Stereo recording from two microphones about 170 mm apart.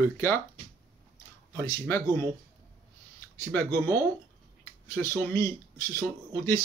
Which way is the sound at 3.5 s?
15° left (ahead or behind).